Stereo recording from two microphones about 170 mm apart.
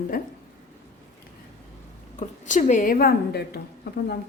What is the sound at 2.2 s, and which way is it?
A woman's voice, 45° left (ahead or behind).